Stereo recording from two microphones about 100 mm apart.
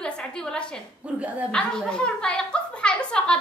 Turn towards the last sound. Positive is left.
turn(degrees=10)  # may be behind; listen again after turning